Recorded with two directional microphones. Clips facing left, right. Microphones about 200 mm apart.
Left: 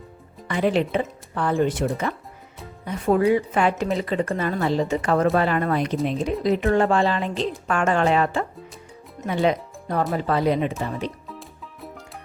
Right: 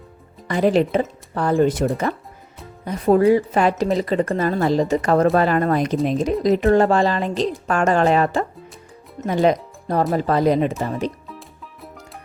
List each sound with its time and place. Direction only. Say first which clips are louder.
0.4 s a woman's voice: right 4 dB; 40° right (ahead or behind)
11.3 s music: even; centre (ahead or behind)